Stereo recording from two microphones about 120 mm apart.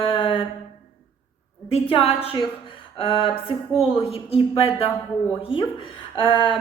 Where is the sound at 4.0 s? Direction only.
55° left (ahead or behind).